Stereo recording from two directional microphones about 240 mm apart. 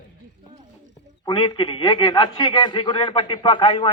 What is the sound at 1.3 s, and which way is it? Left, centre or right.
A man's voice, centre.